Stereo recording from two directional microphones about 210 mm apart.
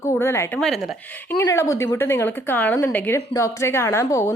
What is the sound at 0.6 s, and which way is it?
Speech, centre (ahead or behind).